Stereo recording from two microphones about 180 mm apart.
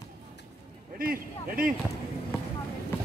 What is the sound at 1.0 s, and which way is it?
Speech, 50° right (ahead or behind).